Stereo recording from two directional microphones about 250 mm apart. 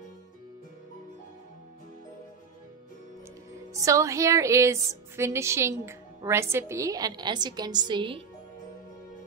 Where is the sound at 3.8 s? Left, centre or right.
Centre.